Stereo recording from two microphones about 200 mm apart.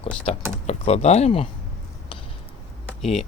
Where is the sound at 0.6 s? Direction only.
30° left (ahead or behind).